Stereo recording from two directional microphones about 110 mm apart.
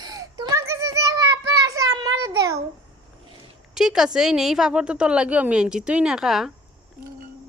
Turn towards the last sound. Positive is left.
turn(degrees=-5)  # may be behind; listen again after turning